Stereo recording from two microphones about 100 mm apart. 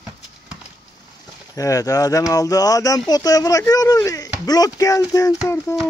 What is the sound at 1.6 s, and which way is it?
Speech, 35° left (ahead or behind).